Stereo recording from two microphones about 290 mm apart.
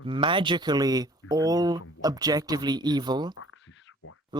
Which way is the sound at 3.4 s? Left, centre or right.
Left.